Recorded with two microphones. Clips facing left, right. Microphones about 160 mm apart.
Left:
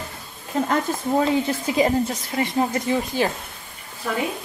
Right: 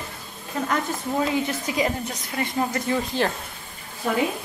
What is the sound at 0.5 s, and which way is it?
A woman's voice, 30° left (ahead or behind).